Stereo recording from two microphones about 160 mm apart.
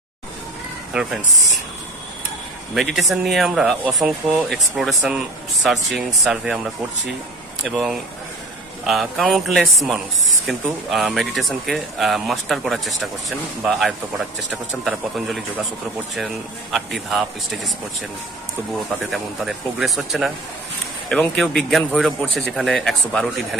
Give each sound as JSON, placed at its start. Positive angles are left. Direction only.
{"t": 2.7, "sound": "speech", "side_deg": 0}
{"t": 7.6, "sound": "speech", "side_deg": 0}
{"t": 16.7, "sound": "speech", "side_deg": 0}
{"t": 19.1, "sound": "speech", "side_deg": 0}